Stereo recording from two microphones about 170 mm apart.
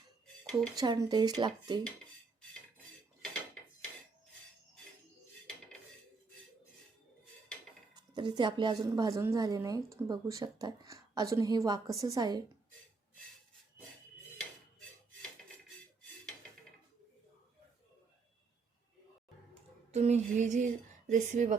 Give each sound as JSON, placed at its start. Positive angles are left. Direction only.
{"t": 0.8, "sound": "a woman's voice", "side_deg": -25}
{"t": 2.4, "sound": "dishes", "side_deg": 5}
{"t": 7.9, "sound": "a woman's voice", "side_deg": -25}
{"t": 19.9, "sound": "music", "side_deg": -40}